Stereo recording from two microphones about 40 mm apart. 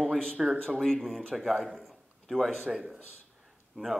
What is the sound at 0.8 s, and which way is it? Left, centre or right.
Speech, centre.